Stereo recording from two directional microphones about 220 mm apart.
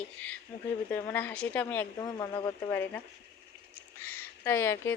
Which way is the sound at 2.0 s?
20° left (ahead or behind).